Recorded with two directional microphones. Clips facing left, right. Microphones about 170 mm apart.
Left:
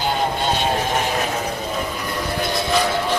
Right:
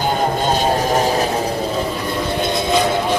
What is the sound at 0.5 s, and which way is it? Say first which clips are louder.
Vehicle: right 4 dB; 40° right (ahead or behind).